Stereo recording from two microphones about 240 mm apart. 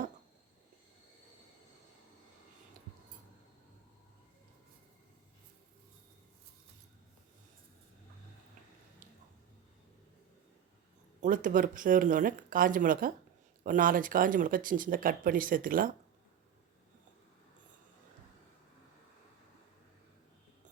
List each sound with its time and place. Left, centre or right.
11.2 s speech: right